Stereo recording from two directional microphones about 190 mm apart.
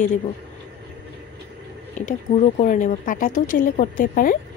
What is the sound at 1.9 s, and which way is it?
Speech, 40° left (ahead or behind).